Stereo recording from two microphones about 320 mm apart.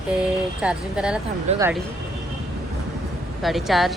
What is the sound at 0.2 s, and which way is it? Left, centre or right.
Speech, centre.